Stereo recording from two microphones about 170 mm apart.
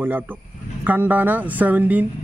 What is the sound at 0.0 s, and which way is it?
A man's voice, 10° right (ahead or behind).